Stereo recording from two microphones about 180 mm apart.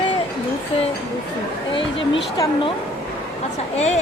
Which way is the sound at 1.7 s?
30° left (ahead or behind).